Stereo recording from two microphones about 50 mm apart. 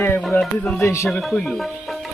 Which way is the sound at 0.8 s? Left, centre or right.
Left.